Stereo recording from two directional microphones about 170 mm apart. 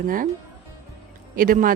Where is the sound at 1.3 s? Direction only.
55° right (ahead or behind).